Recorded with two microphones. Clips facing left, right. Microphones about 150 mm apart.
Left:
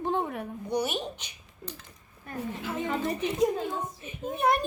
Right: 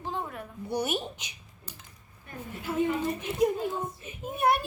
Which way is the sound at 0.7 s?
5° right (ahead or behind).